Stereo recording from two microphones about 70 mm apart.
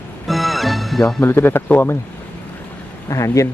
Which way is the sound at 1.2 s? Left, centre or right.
Left.